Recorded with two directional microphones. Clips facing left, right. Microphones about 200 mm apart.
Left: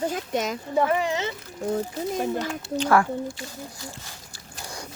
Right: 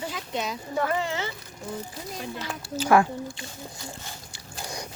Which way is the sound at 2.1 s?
45° left (ahead or behind).